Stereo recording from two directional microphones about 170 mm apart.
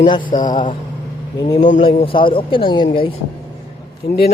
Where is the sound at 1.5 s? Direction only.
45° left (ahead or behind).